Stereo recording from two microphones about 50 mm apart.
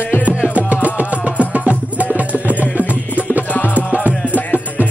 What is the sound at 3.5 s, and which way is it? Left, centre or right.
Music, left.